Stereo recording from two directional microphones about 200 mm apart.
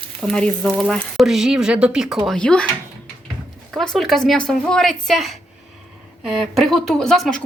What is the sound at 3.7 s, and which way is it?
Speech, centre (ahead or behind).